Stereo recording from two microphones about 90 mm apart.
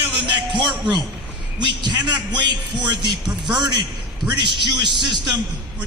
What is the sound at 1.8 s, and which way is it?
A man's voice, 55° right (ahead or behind).